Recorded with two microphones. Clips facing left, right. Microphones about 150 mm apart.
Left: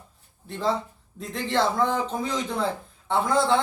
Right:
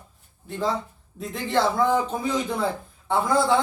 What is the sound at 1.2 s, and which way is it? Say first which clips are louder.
A child's voice: right 1 dB; 5° right (ahead or behind).